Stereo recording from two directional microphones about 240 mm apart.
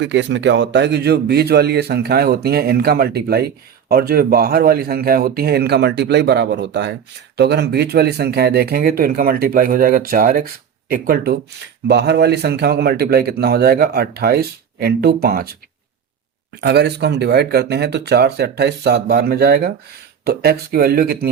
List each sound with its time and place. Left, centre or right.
0.0 s speech: right
16.6 s speech: right